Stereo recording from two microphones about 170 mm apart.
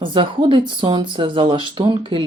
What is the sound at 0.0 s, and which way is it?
Speech, 30° right (ahead or behind).